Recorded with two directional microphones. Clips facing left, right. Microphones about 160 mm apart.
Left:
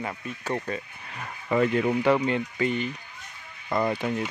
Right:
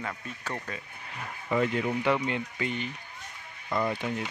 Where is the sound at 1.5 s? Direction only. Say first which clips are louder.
Left 4 dB; 50° left (ahead or behind).